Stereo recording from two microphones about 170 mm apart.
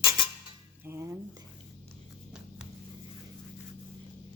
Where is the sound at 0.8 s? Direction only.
15° right (ahead or behind).